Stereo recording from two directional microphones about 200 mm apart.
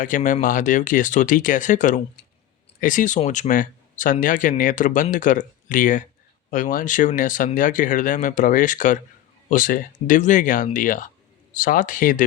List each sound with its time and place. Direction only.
0.0 s speech: 40° left (ahead or behind)